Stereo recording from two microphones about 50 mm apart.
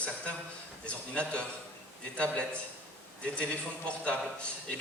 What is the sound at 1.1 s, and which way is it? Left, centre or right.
A man's voice, left.